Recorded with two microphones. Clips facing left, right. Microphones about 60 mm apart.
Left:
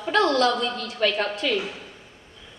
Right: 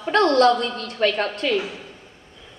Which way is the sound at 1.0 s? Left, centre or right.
Right.